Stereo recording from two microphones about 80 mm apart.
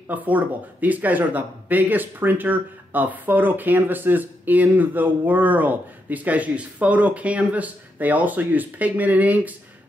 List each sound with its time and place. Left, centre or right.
0.1 s speech: right